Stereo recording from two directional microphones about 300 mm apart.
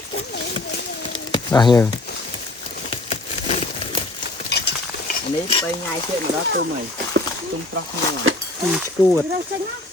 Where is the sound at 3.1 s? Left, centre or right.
Centre.